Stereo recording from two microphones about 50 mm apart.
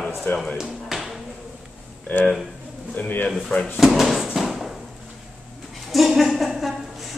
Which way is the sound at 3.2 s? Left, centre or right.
Centre.